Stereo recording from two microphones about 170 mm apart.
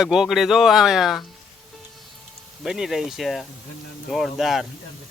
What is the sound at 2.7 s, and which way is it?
Speech, 5° right (ahead or behind).